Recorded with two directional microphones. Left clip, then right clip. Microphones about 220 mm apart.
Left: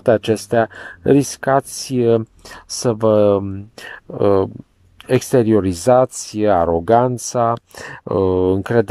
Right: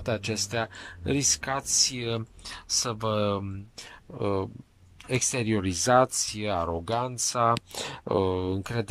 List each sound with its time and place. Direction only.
0.0 s speech: 30° left (ahead or behind)
6.4 s speech: 35° left (ahead or behind)
7.7 s speech: 5° left (ahead or behind)
8.5 s speech: 35° left (ahead or behind)